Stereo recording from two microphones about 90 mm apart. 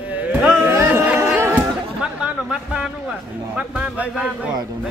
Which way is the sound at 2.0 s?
10° right (ahead or behind).